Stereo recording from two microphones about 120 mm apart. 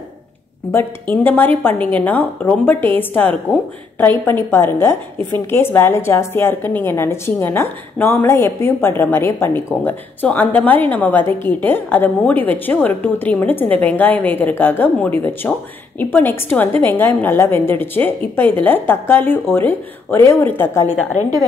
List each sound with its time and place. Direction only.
0.7 s a woman's voice: 15° left (ahead or behind)